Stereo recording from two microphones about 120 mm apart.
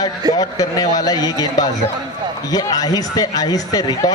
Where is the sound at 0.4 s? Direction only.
30° left (ahead or behind).